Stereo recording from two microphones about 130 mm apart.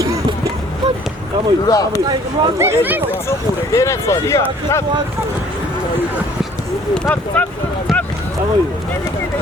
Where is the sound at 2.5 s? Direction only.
15° right (ahead or behind).